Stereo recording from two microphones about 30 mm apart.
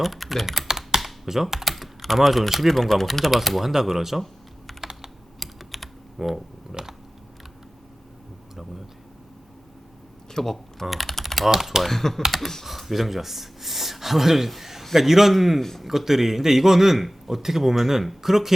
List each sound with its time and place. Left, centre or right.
0.0 s speech: centre
0.7 s computer keyboard: centre
0.9 s computer keyboard: centre
1.6 s speech: centre
2.6 s a man's voice: centre
4.8 s computer keyboard: centre
5.4 s typing: centre
10.3 s speech: centre
10.9 s typing: centre
11.6 s a man's voice: centre
11.9 s speech: centre
12.6 s gasp: centre
14.9 s a man's voice: centre